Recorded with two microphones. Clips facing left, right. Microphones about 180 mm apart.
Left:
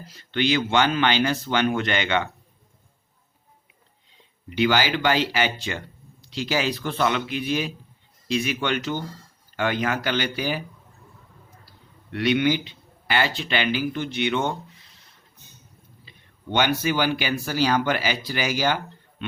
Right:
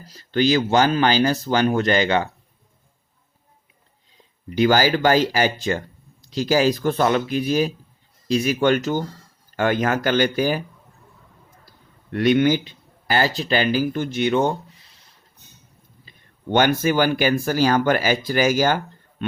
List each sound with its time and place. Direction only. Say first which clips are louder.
0.0 s a man's voice: right 5 dB; 40° right (ahead or behind)
4.4 s a man's voice: right 4 dB; 40° right (ahead or behind)
12.1 s a man's voice: right 4 dB; 45° right (ahead or behind)
16.0 s speech: right 6 dB; 45° right (ahead or behind)